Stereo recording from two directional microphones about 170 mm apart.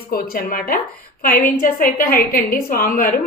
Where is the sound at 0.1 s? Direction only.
60° left (ahead or behind).